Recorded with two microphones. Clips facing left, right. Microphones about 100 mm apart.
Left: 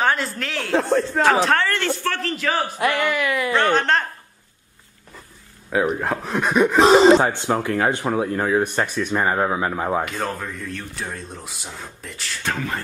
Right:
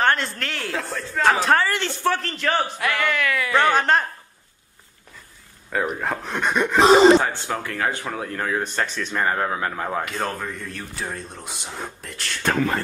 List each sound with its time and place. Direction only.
0.0 s speech: 5° left (ahead or behind)
0.8 s speech: 45° left (ahead or behind)
1.2 s speech: centre (ahead or behind)
2.8 s speech: 20° left (ahead or behind)
3.5 s a woman's voice: 10° right (ahead or behind)
5.7 s speech: 5° left (ahead or behind)
7.2 s speech: 20° left (ahead or behind)
10.0 s speech: centre (ahead or behind)